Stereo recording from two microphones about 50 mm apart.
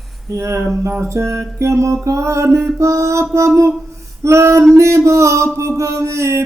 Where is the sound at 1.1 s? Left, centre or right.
Right.